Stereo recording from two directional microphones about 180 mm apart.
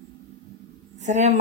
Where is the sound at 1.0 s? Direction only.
40° right (ahead or behind).